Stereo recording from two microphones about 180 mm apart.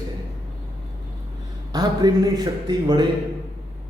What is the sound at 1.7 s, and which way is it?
A man's voice, 20° right (ahead or behind).